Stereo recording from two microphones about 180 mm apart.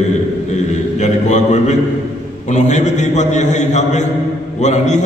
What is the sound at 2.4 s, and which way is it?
A man's voice, 40° left (ahead or behind).